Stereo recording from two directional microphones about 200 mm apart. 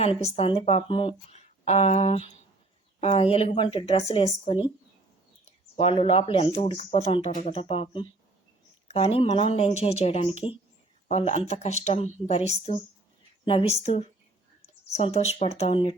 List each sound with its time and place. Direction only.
0.0 s speech: 30° left (ahead or behind)
5.7 s speech: 30° left (ahead or behind)
11.3 s speech: 35° left (ahead or behind)